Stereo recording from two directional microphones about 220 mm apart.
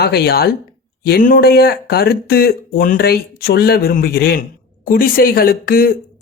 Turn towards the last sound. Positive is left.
turn(degrees=40)  # may be behind; listen again after turning